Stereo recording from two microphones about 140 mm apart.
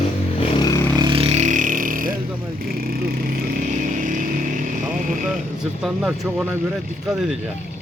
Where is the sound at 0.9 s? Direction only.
35° right (ahead or behind); by 2.1 s 85° right.